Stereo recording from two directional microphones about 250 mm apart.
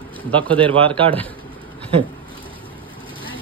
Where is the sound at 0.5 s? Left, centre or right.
Right.